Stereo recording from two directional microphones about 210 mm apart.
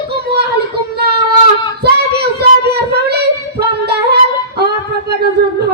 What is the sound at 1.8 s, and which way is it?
Child singing, 50° right (ahead or behind).